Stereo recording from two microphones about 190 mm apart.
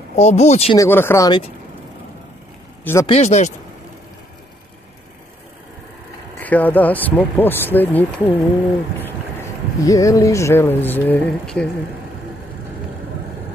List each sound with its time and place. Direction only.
0.1 s speech: 35° left (ahead or behind)
0.7 s speech: 10° left (ahead or behind)
2.8 s speech: 10° left (ahead or behind)
3.1 s speech: 35° left (ahead or behind)
6.4 s speech: 10° left (ahead or behind)
9.8 s speech: 15° left (ahead or behind)